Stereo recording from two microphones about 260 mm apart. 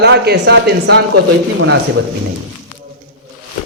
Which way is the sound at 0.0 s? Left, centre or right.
Right.